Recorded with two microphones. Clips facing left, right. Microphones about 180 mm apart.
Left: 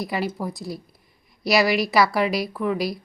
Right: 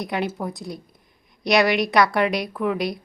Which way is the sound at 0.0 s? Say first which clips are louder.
Even; centre (ahead or behind).